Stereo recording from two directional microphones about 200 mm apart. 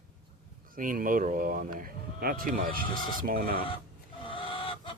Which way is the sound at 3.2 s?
45° right (ahead or behind).